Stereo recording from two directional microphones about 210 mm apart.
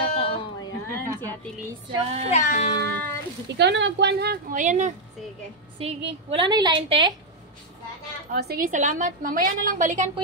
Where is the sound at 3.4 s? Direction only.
55° right (ahead or behind); by 7.2 s 20° right (ahead or behind).